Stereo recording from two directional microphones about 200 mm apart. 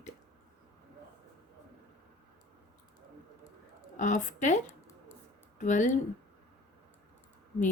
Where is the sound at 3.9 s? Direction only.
40° left (ahead or behind).